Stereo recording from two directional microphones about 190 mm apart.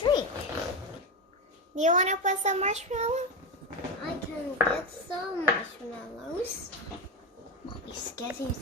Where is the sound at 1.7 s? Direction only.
40° right (ahead or behind).